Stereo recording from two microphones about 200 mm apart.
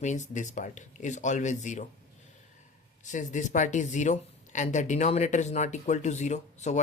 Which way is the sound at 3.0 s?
40° left (ahead or behind).